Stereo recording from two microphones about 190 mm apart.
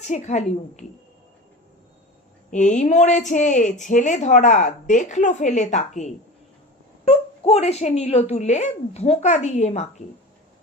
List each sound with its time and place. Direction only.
0.1 s a woman's voice: 35° left (ahead or behind)
2.5 s a woman's voice: 40° left (ahead or behind)